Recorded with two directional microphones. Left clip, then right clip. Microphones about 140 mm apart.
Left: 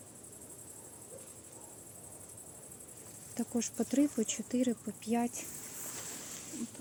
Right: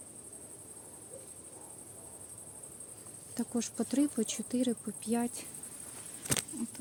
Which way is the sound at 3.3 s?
10° right (ahead or behind).